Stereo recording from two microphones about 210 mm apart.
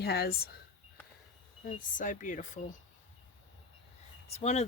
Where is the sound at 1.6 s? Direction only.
40° left (ahead or behind).